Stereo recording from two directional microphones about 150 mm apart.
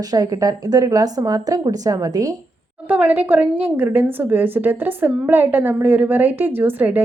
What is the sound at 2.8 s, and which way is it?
A woman's voice, 10° right (ahead or behind).